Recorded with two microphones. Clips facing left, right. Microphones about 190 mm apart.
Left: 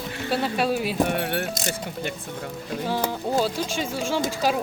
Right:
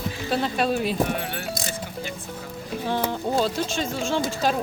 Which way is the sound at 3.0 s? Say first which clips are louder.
Even; 10° left (ahead or behind).